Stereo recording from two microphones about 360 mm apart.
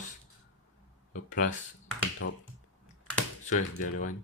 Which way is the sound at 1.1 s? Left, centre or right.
Left.